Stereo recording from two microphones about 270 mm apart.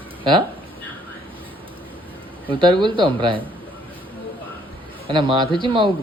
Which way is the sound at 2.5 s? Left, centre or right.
Centre.